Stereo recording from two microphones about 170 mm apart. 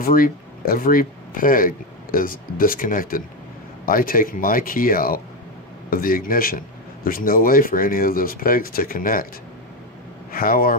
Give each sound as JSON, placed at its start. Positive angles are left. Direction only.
{"t": 0.0, "sound": "speech", "side_deg": 55}
{"t": 10.3, "sound": "speech", "side_deg": 60}